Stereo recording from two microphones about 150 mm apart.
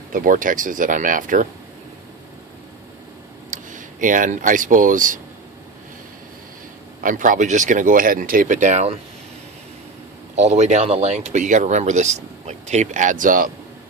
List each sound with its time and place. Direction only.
0.1 s speech: 65° right (ahead or behind)
3.5 s speech: 60° right (ahead or behind)
7.0 s speech: 65° right (ahead or behind)
10.3 s speech: 50° right (ahead or behind); by 13.5 s 65° right (ahead or behind)